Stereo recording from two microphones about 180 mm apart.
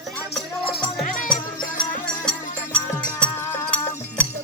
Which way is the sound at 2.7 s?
5° left (ahead or behind).